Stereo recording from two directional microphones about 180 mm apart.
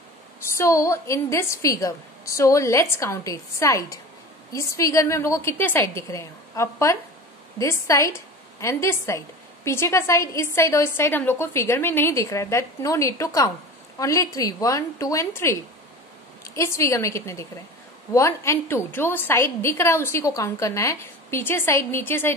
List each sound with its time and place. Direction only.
0.6 s a woman's voice: 15° left (ahead or behind)